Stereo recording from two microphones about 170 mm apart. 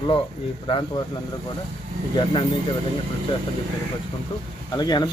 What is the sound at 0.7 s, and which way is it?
Speech, 30° left (ahead or behind).